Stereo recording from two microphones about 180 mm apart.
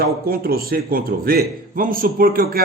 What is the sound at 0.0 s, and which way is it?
A man's voice, 55° right (ahead or behind).